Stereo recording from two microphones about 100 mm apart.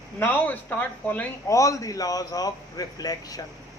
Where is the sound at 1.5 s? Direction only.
30° left (ahead or behind).